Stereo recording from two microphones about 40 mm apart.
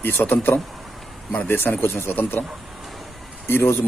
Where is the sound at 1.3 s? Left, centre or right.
Left.